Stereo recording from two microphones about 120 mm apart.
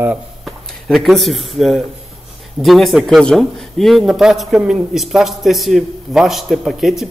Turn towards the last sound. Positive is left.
turn(degrees=0)  # may be behind; listen again after turning